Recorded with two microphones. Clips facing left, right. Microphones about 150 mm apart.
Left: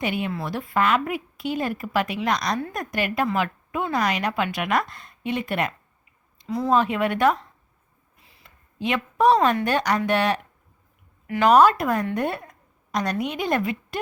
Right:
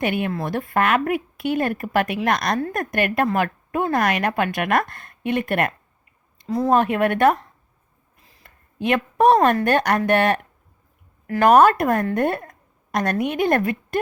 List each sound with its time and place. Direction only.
0.0 s a woman's voice: 55° right (ahead or behind)
8.2 s a woman's voice: 40° right (ahead or behind)